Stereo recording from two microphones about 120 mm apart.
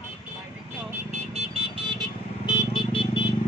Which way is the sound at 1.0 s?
60° right (ahead or behind).